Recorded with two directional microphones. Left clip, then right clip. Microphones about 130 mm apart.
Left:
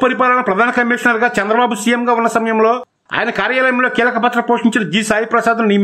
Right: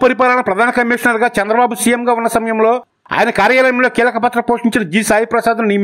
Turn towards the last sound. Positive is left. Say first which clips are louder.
# even
turn(degrees=-30)  # may be behind; listen again after turning